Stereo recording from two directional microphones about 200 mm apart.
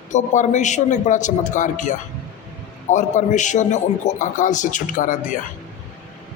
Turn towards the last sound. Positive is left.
turn(degrees=40)  # may be behind; listen again after turning